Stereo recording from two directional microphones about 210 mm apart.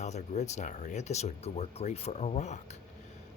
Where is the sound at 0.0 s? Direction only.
35° left (ahead or behind).